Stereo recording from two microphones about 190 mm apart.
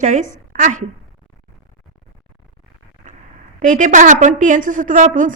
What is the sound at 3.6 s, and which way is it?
A woman's voice, 40° right (ahead or behind).